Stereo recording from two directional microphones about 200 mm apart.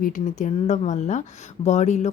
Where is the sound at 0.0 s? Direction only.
40° left (ahead or behind).